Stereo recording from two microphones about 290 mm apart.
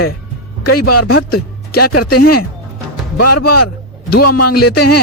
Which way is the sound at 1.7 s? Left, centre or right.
Left.